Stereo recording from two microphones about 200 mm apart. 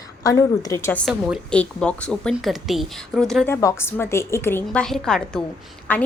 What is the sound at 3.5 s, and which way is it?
A woman's voice, 15° left (ahead or behind).